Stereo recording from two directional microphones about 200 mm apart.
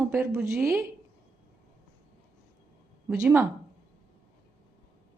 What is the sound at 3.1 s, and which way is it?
Speech, 10° right (ahead or behind).